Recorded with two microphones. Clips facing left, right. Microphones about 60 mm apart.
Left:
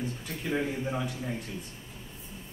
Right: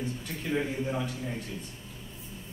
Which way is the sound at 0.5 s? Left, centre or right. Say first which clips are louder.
Even; centre.